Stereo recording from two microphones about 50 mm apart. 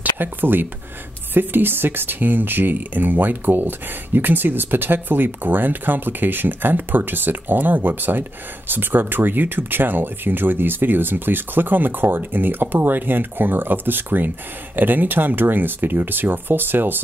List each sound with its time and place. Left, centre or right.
0.2 s speech: right